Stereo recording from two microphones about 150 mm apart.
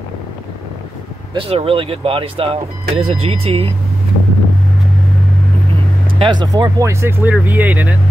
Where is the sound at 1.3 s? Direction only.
40° right (ahead or behind).